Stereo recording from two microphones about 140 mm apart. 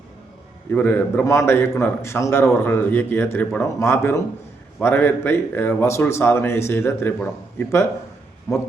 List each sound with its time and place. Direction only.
0.7 s a man's voice: 15° left (ahead or behind)